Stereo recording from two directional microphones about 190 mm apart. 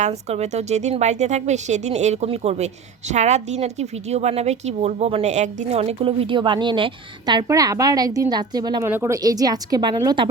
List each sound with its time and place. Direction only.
0.0 s a woman's voice: 35° right (ahead or behind)